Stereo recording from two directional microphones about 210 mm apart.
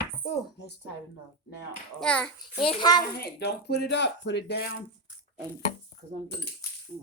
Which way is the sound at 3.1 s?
50° left (ahead or behind).